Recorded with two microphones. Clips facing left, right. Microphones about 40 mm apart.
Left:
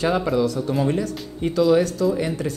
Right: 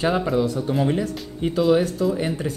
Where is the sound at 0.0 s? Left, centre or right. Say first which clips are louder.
Left 1 dB; right.